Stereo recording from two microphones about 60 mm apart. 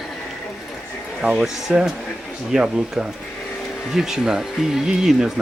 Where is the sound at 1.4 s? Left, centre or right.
Centre.